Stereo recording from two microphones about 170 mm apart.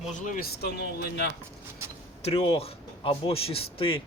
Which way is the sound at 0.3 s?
65° left (ahead or behind).